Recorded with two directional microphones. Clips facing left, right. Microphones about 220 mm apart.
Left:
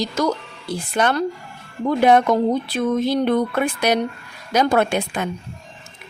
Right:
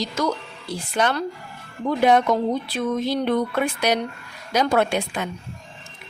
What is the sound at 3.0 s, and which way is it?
Speech, 50° left (ahead or behind).